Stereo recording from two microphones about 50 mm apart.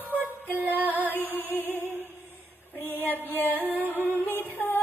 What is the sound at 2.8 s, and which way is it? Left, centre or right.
Female singing, left.